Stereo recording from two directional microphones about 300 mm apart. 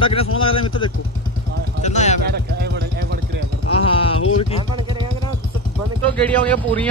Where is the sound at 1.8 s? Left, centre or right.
Left.